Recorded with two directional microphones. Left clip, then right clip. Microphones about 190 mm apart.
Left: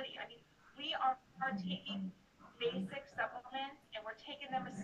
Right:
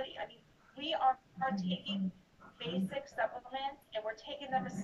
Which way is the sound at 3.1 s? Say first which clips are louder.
Right 3 dB; 40° right (ahead or behind).